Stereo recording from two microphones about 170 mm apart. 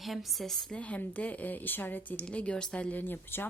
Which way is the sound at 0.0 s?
Centre (ahead or behind).